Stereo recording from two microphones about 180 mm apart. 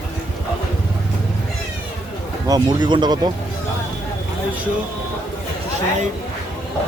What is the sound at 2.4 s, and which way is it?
Speech, 25° right (ahead or behind).